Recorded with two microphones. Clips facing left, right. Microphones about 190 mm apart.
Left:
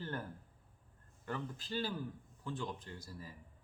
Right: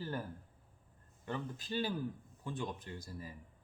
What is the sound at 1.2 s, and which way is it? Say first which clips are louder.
Speech: right 1 dB; 20° right (ahead or behind).